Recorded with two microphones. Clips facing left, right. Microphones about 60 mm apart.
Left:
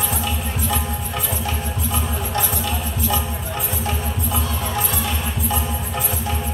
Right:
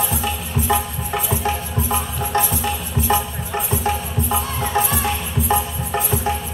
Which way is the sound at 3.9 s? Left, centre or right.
Right.